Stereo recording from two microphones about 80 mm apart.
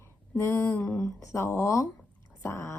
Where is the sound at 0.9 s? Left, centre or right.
Left.